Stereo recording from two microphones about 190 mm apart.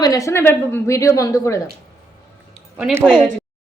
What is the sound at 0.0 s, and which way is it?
A woman's voice, 20° left (ahead or behind).